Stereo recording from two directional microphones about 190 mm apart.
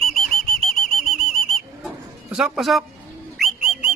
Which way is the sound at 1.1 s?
Centre (ahead or behind).